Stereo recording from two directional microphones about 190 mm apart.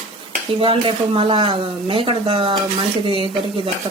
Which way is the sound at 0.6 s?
30° right (ahead or behind).